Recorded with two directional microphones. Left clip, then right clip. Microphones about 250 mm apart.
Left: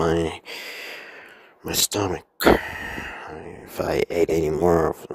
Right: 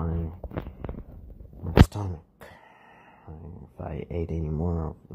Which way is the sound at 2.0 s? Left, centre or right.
Left.